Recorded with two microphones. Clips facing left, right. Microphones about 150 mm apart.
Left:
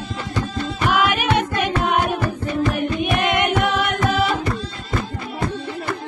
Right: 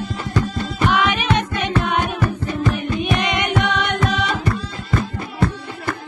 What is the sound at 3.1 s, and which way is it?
Music, 5° left (ahead or behind).